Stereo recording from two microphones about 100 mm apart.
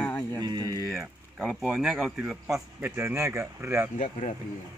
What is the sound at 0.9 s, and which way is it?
Speech, 5° right (ahead or behind).